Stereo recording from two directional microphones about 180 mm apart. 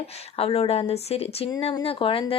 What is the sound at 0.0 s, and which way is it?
Speech, 35° left (ahead or behind).